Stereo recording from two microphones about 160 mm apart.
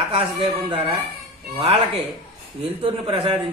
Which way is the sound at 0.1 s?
30° right (ahead or behind).